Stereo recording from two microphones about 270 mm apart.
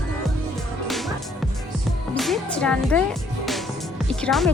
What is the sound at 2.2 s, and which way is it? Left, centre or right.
Music, centre.